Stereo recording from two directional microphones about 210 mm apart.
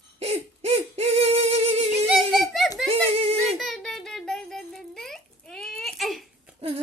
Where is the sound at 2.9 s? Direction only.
25° right (ahead or behind).